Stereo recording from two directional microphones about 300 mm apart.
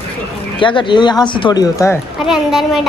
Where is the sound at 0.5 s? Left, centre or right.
Centre.